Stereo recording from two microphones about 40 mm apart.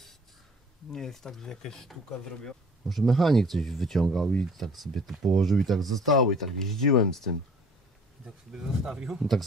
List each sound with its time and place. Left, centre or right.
0.9 s speech: centre
8.5 s speech: centre